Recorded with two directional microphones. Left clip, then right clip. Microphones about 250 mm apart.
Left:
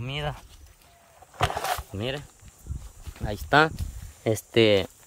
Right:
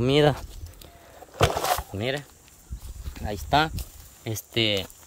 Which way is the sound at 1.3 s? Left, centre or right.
Right.